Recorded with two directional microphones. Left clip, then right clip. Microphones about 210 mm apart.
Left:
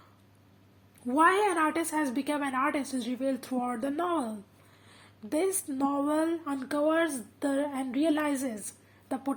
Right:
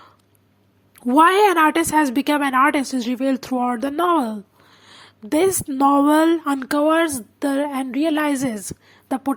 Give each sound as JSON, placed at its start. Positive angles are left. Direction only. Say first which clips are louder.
{"t": 0.9, "sound": "speech", "louder": "right 10 dB", "side_deg": -35}